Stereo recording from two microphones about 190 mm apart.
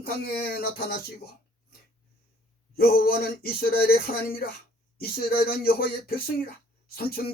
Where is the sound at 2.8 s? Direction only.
55° left (ahead or behind).